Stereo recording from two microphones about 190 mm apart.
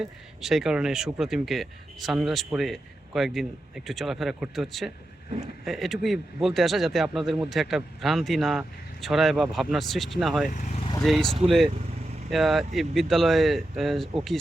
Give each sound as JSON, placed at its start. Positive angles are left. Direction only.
{"t": 0.0, "sound": "speech", "side_deg": 0}
{"t": 10.4, "sound": "speech", "side_deg": 40}
{"t": 11.0, "sound": "speech", "side_deg": 0}